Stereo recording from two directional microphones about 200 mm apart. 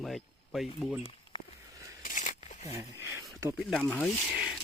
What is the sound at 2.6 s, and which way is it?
Speech, 15° right (ahead or behind).